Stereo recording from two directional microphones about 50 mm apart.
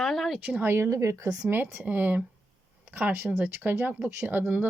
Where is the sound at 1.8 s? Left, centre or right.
Right.